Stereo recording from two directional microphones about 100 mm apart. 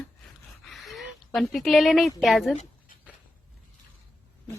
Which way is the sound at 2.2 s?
Centre (ahead or behind).